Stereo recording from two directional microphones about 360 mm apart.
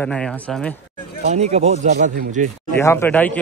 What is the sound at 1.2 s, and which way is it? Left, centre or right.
Speech, centre.